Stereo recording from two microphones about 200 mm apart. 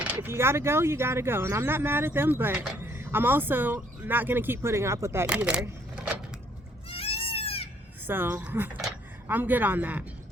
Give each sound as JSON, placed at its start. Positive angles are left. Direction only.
{"t": 0.0, "sound": "speech", "side_deg": -10}
{"t": 6.9, "sound": "goat", "side_deg": 30}
{"t": 8.0, "sound": "speech", "side_deg": -10}